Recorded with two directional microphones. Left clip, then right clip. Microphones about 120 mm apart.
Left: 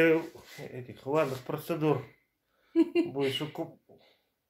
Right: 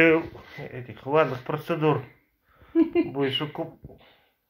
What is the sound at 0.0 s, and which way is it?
Speech, 5° left (ahead or behind).